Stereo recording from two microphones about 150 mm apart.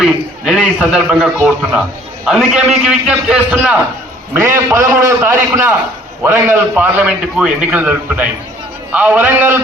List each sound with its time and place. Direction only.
0.0 s a man's voice: 5° right (ahead or behind)